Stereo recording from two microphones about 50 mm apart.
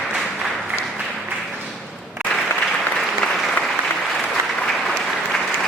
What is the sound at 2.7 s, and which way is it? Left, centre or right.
Applause, centre.